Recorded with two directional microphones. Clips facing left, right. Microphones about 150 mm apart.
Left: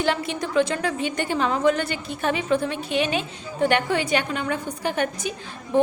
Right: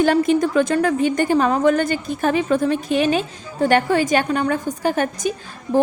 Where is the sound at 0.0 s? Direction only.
45° right (ahead or behind).